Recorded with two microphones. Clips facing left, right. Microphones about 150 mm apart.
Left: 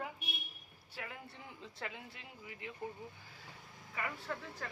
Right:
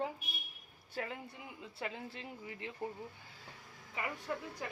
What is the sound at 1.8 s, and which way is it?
Speech, 30° right (ahead or behind).